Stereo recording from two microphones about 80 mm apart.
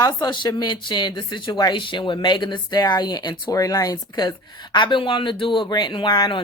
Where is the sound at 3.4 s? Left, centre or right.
Left.